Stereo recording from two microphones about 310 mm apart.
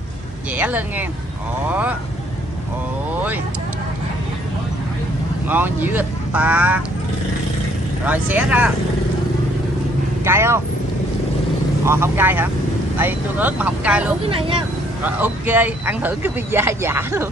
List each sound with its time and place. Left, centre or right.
0.6 s speech: centre
5.5 s speech: centre
8.0 s speech: centre
10.2 s speech: centre
11.8 s speech: centre
14.2 s speech: centre
15.0 s speech: centre